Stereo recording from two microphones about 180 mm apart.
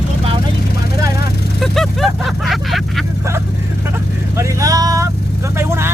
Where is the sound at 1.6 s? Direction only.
Centre (ahead or behind).